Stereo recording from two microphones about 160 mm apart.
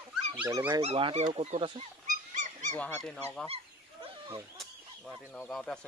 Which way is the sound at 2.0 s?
50° right (ahead or behind).